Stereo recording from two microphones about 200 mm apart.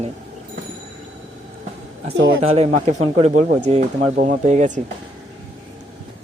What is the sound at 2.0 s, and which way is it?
Speech, 70° right (ahead or behind).